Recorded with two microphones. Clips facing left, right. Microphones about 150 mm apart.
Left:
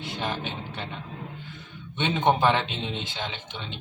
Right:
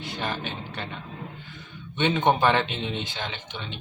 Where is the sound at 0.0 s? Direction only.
20° left (ahead or behind).